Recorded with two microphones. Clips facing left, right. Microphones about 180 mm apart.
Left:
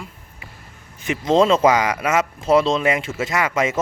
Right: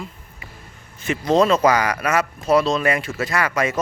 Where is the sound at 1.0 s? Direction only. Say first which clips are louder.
Left 1 dB; 20° left (ahead or behind).